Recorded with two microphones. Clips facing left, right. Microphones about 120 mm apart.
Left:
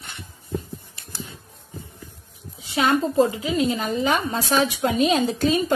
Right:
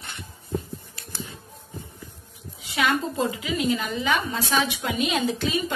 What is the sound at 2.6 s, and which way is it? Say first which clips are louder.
A woman's voice: left 4 dB; 35° left (ahead or behind).